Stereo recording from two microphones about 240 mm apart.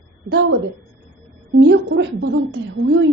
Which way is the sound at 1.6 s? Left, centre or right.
Right.